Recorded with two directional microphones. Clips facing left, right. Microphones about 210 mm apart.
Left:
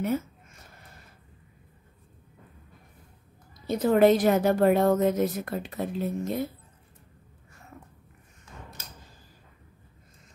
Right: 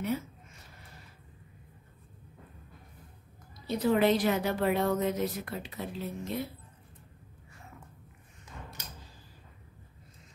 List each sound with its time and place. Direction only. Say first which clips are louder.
3.6 s a woman's voice: left 6 dB; 50° left (ahead or behind)